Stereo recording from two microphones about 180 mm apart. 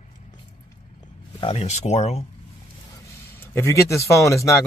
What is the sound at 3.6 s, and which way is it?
Speech, 15° left (ahead or behind).